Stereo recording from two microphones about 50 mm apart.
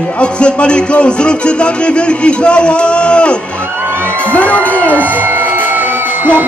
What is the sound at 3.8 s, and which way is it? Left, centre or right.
Music, right.